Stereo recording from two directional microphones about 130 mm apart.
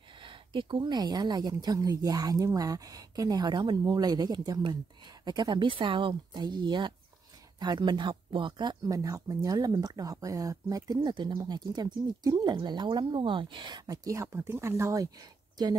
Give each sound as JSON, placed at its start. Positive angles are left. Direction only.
{"t": 0.2, "sound": "speech", "side_deg": -40}